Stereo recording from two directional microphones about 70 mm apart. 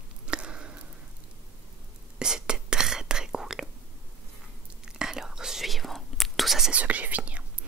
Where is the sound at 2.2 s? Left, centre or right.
Centre.